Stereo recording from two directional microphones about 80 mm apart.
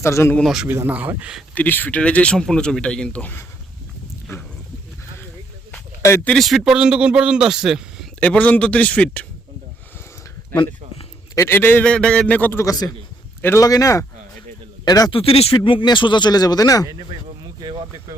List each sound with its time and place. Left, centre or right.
0.0 s speech: left
0.4 s a man's voice: centre
0.9 s a man's voice: right
1.5 s a man's voice: left
6.0 s speech: left
6.4 s speech: centre
6.7 s a man's voice: centre
8.2 s a man's voice: centre
11.3 s a man's voice: left
11.9 s a man's voice: centre
13.6 s speech: left
14.8 s speech: left
15.1 s speech: left
17.6 s speech: right